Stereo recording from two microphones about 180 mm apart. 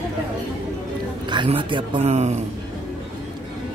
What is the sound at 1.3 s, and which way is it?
Speech, 25° right (ahead or behind).